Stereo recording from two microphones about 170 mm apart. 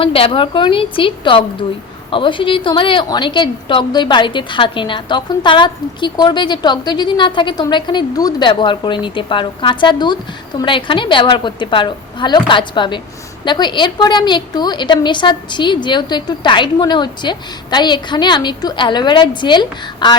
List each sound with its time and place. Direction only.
0.0 s a woman's voice: 30° left (ahead or behind)